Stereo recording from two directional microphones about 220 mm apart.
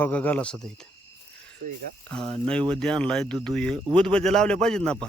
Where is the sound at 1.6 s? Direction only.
50° right (ahead or behind).